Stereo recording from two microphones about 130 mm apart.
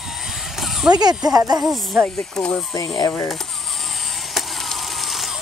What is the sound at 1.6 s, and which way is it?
Speech, centre (ahead or behind).